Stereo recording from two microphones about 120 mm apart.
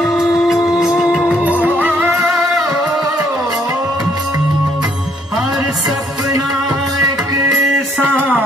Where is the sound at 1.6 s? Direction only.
15° right (ahead or behind).